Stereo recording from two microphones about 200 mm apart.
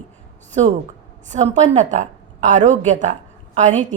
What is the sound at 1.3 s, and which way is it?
A woman's voice, 35° right (ahead or behind).